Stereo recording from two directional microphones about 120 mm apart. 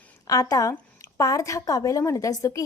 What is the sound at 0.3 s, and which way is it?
A woman's voice, 30° left (ahead or behind).